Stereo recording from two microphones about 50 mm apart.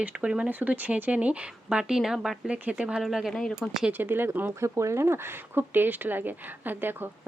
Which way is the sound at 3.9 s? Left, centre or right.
Right.